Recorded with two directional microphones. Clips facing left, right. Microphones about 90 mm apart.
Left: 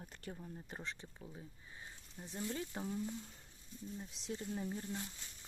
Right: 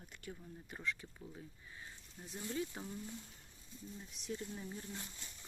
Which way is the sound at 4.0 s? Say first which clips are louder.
Right 1 dB; 30° left (ahead or behind).